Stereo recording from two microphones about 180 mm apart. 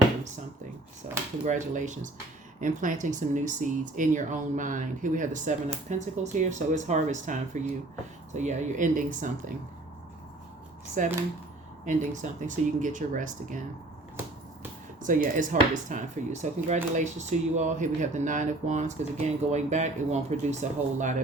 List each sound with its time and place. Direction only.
1.1 s speech: 45° right (ahead or behind)
11.9 s speech: 45° right (ahead or behind)
15.0 s speech: 45° right (ahead or behind)